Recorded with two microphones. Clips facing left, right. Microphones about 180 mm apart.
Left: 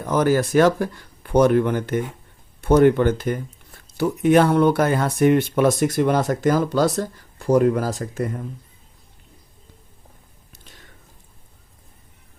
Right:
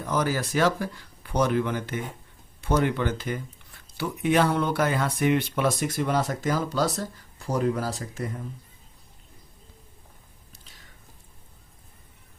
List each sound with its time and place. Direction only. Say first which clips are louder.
0.0 s speech: left 8 dB; 55° left (ahead or behind)